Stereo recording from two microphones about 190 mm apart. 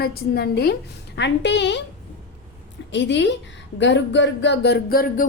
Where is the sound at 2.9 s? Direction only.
70° left (ahead or behind).